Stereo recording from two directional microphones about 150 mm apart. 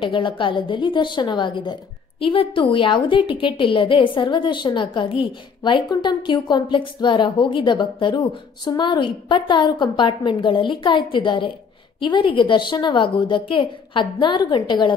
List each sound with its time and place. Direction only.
0.0 s a woman's voice: 35° left (ahead or behind)